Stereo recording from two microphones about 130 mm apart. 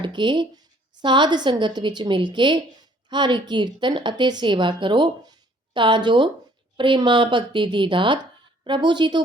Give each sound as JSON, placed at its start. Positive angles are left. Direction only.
{"t": 0.0, "sound": "a woman's voice", "side_deg": -35}